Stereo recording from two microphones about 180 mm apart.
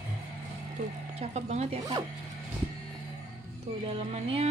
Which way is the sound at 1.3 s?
35° right (ahead or behind).